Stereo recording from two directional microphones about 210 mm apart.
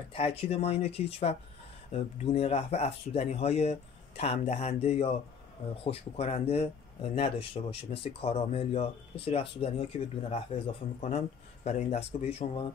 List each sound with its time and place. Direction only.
0.1 s speech: 25° left (ahead or behind)